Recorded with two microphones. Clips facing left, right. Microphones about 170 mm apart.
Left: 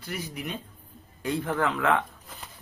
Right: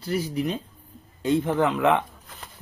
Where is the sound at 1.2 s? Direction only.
20° right (ahead or behind).